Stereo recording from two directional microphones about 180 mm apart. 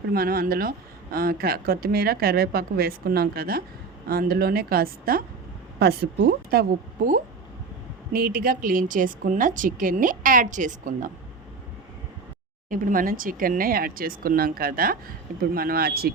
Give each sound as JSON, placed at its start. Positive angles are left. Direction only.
{"t": 0.1, "sound": "a woman's voice", "side_deg": -55}
{"t": 12.7, "sound": "speech", "side_deg": -50}